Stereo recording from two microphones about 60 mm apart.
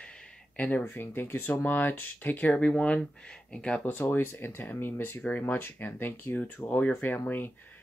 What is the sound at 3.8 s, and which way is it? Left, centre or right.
Speech, left.